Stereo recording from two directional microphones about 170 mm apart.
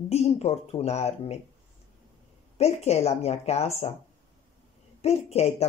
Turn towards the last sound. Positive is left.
turn(degrees=40)  # may be behind; listen again after turning